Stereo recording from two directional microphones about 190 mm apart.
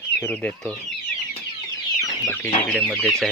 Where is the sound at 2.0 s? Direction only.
20° left (ahead or behind).